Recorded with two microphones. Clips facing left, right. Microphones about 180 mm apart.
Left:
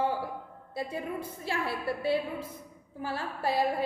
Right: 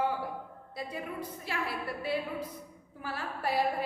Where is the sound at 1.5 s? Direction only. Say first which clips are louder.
Left 5 dB; 30° left (ahead or behind).